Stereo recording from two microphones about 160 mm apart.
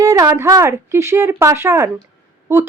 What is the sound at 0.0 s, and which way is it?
Speech, 20° right (ahead or behind).